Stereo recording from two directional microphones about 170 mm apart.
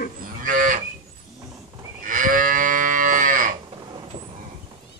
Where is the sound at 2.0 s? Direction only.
50° right (ahead or behind).